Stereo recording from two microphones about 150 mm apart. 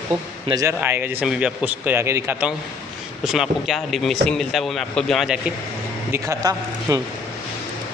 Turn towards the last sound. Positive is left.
turn(degrees=-25)  # may be behind; listen again after turning